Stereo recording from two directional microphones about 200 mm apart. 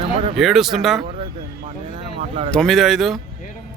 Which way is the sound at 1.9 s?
30° right (ahead or behind).